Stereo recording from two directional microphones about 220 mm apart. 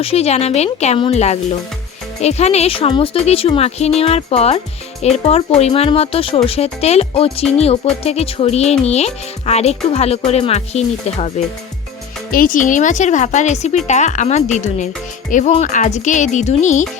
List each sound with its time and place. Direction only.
0.0 s speech: 25° left (ahead or behind)
12.3 s speech: 40° left (ahead or behind)